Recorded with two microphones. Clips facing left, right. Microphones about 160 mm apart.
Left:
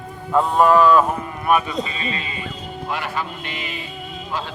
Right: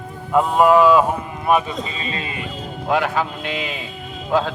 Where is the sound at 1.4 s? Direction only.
25° right (ahead or behind).